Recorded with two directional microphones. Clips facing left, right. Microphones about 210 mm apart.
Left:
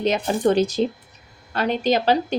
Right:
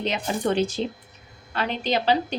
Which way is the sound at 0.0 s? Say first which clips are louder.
Left 6 dB; 40° left (ahead or behind).